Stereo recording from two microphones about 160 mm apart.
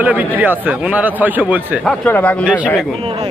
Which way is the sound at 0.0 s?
10° right (ahead or behind).